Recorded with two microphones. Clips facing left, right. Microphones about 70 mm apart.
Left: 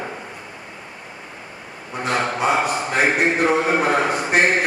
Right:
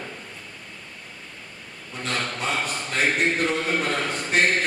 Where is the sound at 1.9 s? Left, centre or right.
Centre.